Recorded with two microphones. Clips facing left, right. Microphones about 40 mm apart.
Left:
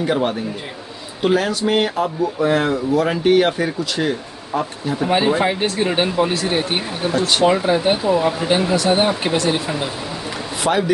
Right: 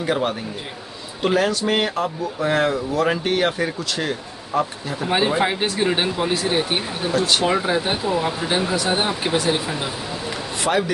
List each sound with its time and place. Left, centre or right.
0.0 s speech: centre
5.1 s speech: centre
8.0 s speech: centre
10.6 s speech: centre